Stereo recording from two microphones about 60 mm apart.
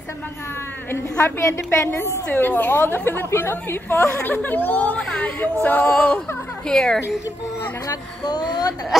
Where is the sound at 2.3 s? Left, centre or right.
Left.